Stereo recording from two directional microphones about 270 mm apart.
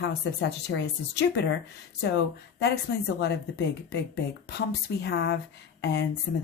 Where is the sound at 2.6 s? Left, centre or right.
Left.